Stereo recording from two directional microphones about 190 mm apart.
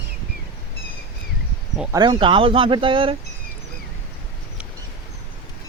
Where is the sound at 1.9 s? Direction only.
25° right (ahead or behind).